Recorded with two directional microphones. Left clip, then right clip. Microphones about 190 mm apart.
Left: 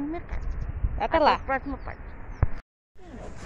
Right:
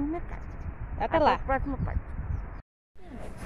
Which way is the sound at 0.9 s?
Centre (ahead or behind).